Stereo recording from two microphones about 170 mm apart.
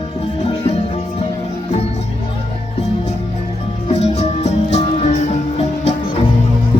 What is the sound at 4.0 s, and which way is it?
Music, 40° left (ahead or behind).